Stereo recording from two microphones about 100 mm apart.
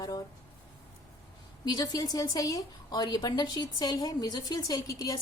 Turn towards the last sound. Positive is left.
turn(degrees=40)  # may be behind; listen again after turning